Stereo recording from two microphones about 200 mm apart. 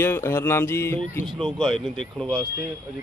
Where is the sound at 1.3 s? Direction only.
25° right (ahead or behind).